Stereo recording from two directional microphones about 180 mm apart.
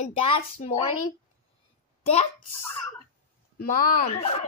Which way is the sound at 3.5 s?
50° left (ahead or behind).